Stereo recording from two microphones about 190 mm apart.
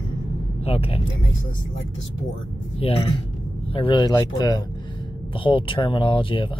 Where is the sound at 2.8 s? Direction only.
30° left (ahead or behind).